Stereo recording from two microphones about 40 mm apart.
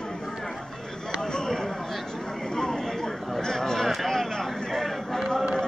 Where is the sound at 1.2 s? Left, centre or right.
Centre.